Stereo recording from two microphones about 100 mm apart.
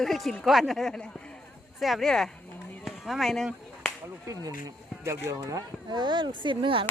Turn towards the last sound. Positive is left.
turn(degrees=-60)  # may be behind; listen again after turning